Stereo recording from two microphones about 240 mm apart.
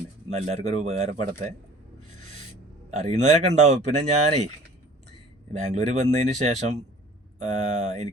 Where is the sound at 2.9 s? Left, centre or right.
Right.